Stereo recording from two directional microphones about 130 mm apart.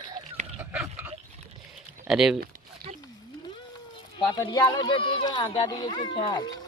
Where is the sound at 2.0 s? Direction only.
5° right (ahead or behind).